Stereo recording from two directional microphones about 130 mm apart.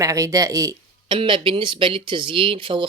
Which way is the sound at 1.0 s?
40° right (ahead or behind).